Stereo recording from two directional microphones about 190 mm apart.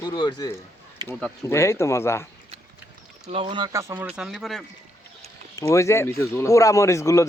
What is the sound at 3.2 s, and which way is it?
Speech, 30° right (ahead or behind).